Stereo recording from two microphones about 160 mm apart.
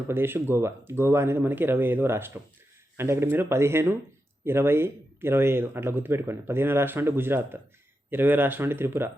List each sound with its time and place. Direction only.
0.1 s speech: 15° right (ahead or behind)